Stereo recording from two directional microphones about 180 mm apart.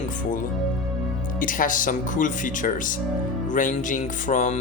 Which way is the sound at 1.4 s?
50° left (ahead or behind).